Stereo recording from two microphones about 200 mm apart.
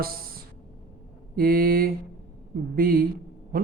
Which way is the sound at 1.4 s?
45° right (ahead or behind).